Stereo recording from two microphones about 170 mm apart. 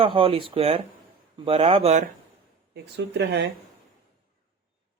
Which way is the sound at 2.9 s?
80° right.